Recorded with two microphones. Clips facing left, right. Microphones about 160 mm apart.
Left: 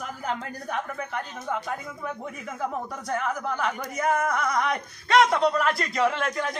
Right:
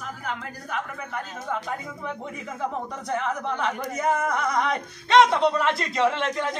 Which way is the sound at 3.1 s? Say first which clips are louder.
Right 1 dB; 25° right (ahead or behind).